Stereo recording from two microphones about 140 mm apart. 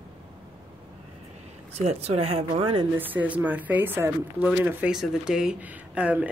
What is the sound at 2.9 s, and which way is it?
Speech, 15° right (ahead or behind).